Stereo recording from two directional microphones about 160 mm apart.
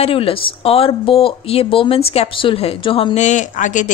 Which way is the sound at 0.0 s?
35° left (ahead or behind).